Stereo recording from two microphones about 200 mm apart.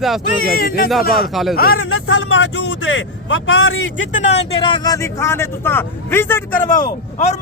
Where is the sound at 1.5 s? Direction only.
50° left (ahead or behind).